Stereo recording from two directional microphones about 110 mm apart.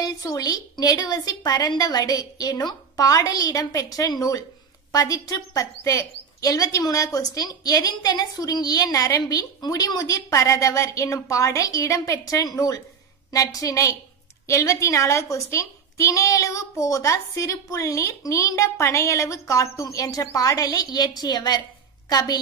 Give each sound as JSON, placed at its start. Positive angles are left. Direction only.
{"t": 0.0, "sound": "a woman's voice", "side_deg": 35}